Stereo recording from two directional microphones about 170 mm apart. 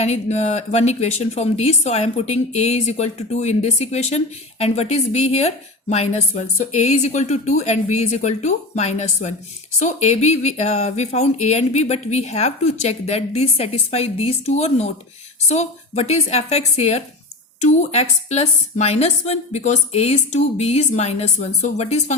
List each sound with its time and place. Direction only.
0.0 s speech: 40° left (ahead or behind)